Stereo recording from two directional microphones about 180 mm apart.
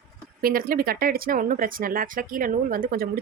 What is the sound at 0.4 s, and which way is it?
A woman's voice, 55° right (ahead or behind).